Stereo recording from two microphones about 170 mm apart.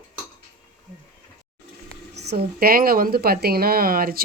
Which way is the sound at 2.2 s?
75° right (ahead or behind).